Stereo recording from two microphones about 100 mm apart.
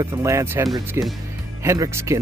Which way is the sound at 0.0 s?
30° right (ahead or behind).